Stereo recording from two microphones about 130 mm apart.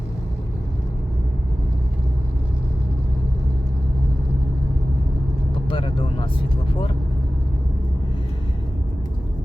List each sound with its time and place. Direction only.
5.6 s vehicle: 40° left (ahead or behind)